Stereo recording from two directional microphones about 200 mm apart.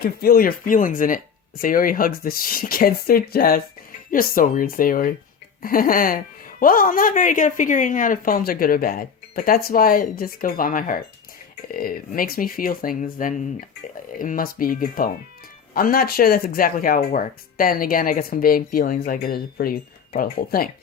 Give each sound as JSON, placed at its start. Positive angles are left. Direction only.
{"t": 0.0, "sound": "speech", "side_deg": 50}